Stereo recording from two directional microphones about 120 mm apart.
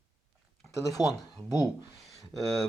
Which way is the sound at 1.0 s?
35° left (ahead or behind).